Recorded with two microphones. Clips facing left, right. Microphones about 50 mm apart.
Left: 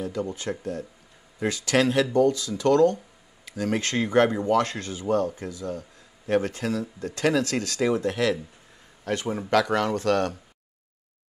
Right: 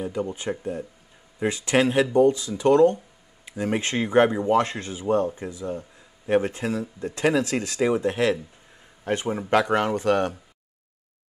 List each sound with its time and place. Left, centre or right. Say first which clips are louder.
0.0 s speech: right 1 dB; right